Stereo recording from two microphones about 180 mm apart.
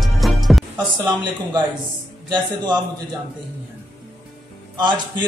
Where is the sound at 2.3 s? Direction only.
25° right (ahead or behind).